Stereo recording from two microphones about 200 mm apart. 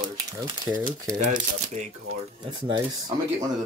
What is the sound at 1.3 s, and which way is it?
Speech, 35° right (ahead or behind).